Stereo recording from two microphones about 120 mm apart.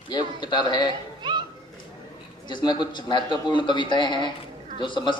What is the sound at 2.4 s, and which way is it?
A man's voice, 40° left (ahead or behind).